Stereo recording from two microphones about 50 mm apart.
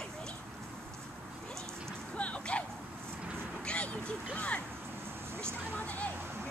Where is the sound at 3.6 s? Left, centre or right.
Left.